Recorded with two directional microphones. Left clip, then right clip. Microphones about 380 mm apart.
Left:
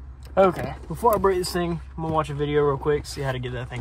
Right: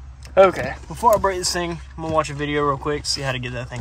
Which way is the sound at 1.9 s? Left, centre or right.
Right.